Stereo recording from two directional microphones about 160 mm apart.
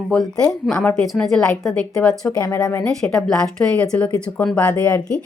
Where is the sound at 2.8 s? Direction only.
Centre (ahead or behind).